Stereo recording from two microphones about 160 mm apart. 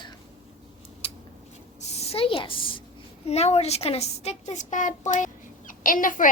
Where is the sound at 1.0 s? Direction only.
40° left (ahead or behind).